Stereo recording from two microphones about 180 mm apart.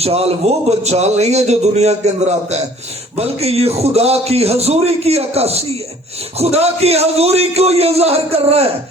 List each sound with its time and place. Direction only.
0.0 s speech: 35° right (ahead or behind)